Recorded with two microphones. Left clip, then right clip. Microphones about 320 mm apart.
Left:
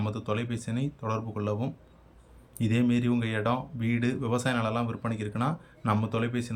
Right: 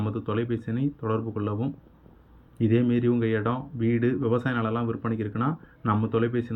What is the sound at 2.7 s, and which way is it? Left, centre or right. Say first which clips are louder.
Speech: right 4 dB; centre.